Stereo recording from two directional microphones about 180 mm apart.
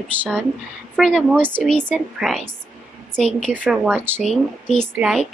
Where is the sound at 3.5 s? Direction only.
5° right (ahead or behind).